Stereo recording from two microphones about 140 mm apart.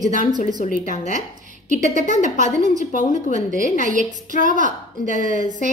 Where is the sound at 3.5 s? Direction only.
65° right (ahead or behind).